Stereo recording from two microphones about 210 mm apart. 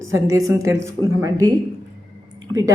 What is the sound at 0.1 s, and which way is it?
Speech, 15° right (ahead or behind).